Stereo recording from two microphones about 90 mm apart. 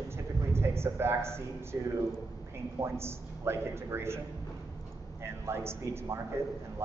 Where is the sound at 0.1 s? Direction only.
30° right (ahead or behind).